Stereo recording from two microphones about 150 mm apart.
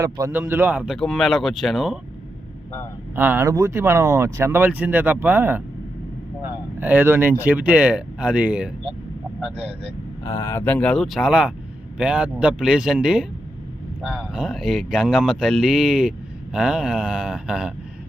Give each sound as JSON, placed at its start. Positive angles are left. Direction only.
{"t": 0.0, "sound": "speech", "side_deg": -20}
{"t": 0.9, "sound": "speech", "side_deg": 0}
{"t": 3.2, "sound": "speech", "side_deg": -15}
{"t": 6.7, "sound": "speech", "side_deg": -15}
{"t": 10.2, "sound": "speech", "side_deg": 30}
{"t": 10.5, "sound": "speech", "side_deg": 10}